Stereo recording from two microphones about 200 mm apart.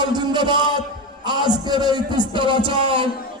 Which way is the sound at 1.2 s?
20° right (ahead or behind).